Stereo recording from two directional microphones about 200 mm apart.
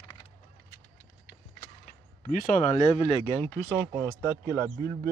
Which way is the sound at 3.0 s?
25° left (ahead or behind).